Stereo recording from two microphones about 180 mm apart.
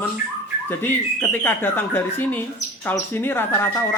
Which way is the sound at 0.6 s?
10° left (ahead or behind).